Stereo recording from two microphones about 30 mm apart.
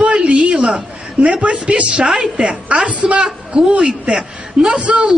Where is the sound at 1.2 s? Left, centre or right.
Right.